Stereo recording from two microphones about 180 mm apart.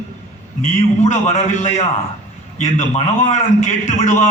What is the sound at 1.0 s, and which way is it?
A man's voice, 40° left (ahead or behind).